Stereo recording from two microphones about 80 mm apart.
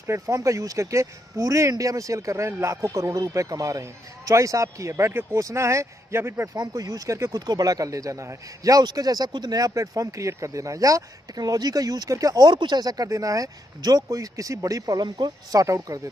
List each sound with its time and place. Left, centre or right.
0.0 s speech: right
6.7 s speech: right
12.4 s speech: right
14.0 s speech: right
15.6 s speech: right